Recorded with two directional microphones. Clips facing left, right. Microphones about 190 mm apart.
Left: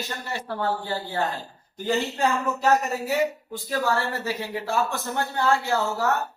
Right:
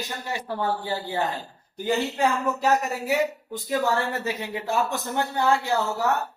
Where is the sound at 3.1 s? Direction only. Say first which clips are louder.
Right 1 dB; 20° right (ahead or behind).